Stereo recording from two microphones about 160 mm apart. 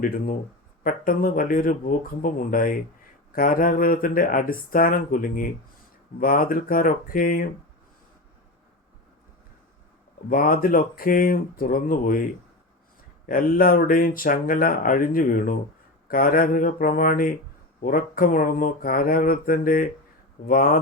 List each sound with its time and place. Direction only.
0.0 s speech: 65° left (ahead or behind)
10.2 s speech: 60° left (ahead or behind)